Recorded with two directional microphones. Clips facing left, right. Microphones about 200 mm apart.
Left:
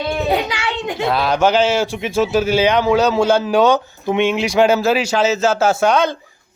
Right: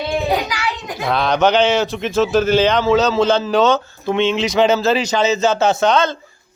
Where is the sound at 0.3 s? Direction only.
25° left (ahead or behind).